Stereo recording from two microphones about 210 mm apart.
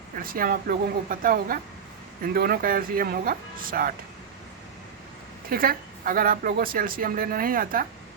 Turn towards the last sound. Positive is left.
turn(degrees=-40)  # may be behind; listen again after turning